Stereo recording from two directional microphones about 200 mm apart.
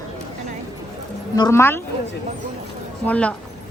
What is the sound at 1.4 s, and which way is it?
Speech, 15° left (ahead or behind).